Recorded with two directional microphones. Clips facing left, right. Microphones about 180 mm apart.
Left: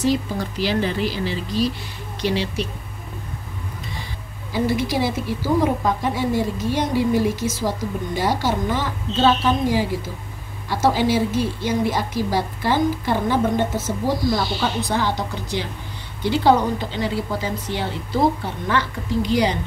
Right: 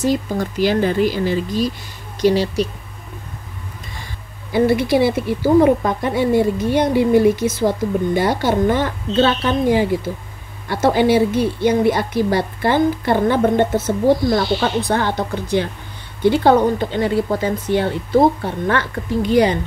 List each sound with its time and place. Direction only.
0.0 s speech: 45° right (ahead or behind)
4.5 s a woman's voice: 60° right (ahead or behind)